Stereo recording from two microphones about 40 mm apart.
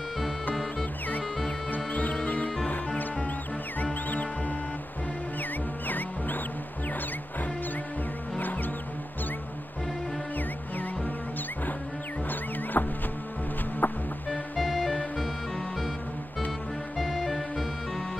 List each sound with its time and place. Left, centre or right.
1.9 s music: left
3.8 s music: left
5.9 s music: left
12.7 s music: left
14.6 s music: centre
17.0 s music: centre